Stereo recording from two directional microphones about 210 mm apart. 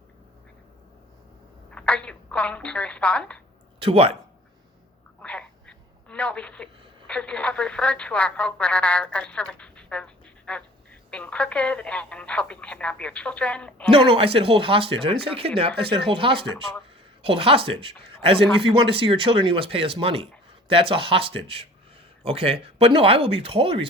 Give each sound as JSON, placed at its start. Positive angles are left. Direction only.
{"t": 1.7, "sound": "a woman's voice", "side_deg": 5}
{"t": 3.8, "sound": "speech", "side_deg": -25}
{"t": 5.2, "sound": "a sound", "side_deg": 5}
{"t": 7.1, "sound": "speech", "side_deg": 5}
{"t": 13.9, "sound": "a man's voice", "side_deg": -25}